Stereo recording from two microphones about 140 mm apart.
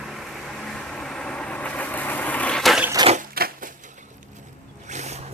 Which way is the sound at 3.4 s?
90° right.